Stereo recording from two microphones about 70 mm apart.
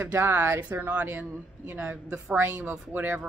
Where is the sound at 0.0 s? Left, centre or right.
Right.